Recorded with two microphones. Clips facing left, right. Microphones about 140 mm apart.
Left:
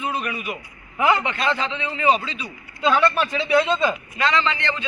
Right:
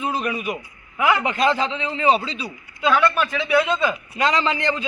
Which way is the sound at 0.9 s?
5° right (ahead or behind).